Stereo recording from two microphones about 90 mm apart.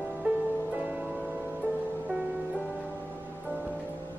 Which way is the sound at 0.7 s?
20° right (ahead or behind).